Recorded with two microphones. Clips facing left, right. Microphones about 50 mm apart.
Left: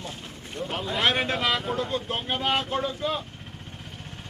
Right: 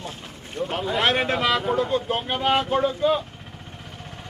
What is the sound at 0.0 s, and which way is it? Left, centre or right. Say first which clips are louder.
Speech: right 2 dB; centre.